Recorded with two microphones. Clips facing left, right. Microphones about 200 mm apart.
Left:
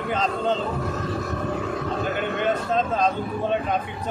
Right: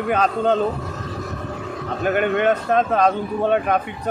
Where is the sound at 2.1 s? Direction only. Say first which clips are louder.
Right 9 dB; 65° right (ahead or behind).